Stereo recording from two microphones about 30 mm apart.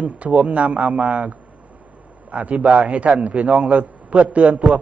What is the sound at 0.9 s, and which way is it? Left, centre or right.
Speech, right.